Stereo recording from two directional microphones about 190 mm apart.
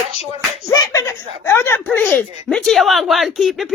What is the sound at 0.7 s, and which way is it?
Speech, 20° left (ahead or behind).